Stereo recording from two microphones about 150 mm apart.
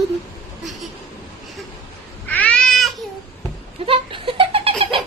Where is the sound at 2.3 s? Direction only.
10° left (ahead or behind).